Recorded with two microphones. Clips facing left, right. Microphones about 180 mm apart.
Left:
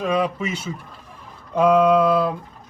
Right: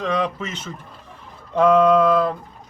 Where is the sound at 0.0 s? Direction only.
10° left (ahead or behind).